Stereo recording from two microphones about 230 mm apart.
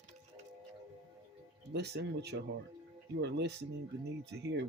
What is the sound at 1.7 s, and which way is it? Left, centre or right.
Speech, right.